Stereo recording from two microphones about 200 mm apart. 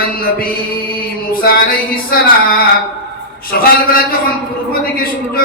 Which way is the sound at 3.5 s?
45° left (ahead or behind).